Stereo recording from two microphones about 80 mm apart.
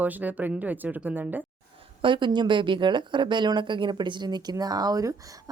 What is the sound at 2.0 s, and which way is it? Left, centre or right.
Speech, right.